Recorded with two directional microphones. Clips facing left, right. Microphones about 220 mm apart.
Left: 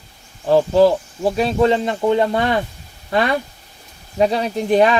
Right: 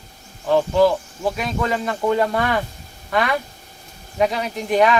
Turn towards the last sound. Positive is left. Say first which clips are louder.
# left 3 dB
turn(degrees=30)  # may be behind; listen again after turning